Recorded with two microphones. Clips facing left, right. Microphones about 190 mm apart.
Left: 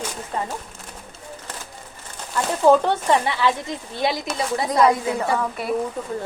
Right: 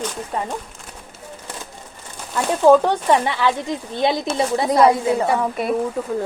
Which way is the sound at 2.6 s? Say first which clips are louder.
Right 3 dB; 15° right (ahead or behind).